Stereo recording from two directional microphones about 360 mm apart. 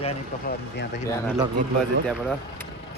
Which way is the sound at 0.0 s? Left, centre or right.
Centre.